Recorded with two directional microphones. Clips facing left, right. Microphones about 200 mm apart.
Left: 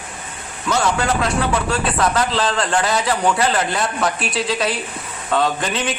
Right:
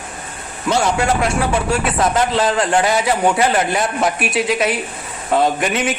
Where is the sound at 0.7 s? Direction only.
25° right (ahead or behind).